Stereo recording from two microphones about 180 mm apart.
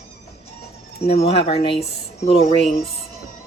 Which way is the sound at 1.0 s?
35° left (ahead or behind).